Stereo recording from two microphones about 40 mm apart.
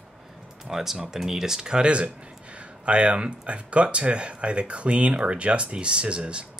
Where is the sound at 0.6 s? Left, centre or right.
Centre; by 6.5 s right.